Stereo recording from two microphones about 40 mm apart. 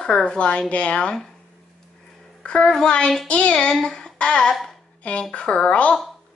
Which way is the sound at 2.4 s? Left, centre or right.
Left.